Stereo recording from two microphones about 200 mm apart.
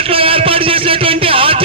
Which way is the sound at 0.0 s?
30° right (ahead or behind).